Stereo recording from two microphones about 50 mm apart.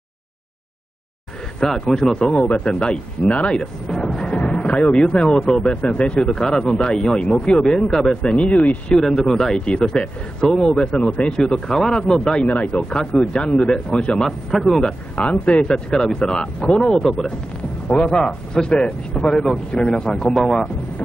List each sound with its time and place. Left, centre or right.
1.6 s speech: centre
3.9 s music: centre
4.2 s music: left
5.0 s speech: centre
8.9 s speech: centre
9.7 s speech: centre
12.4 s speech: left
15.5 s speech: centre
20.3 s speech: centre